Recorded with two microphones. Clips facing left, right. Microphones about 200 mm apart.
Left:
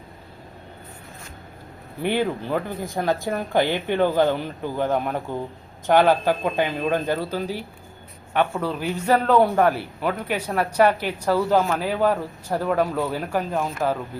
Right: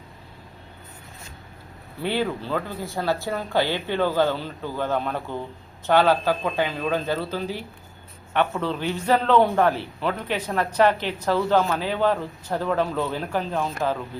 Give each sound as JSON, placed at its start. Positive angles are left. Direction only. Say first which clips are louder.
{"t": 2.0, "sound": "a man's voice", "louder": "left 2 dB", "side_deg": 15}